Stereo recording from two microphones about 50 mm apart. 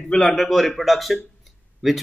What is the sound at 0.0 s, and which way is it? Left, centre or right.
A man's voice, centre.